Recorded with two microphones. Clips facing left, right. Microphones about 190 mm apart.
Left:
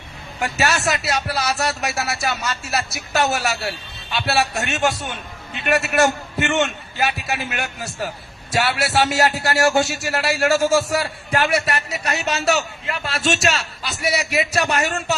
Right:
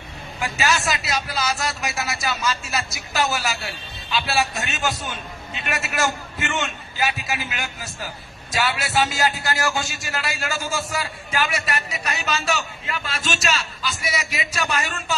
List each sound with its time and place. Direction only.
0.4 s a man's voice: 65° left (ahead or behind)